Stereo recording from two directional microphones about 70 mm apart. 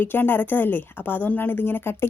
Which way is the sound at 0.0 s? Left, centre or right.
Left.